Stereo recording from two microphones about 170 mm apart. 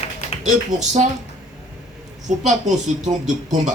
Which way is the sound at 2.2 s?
45° right (ahead or behind).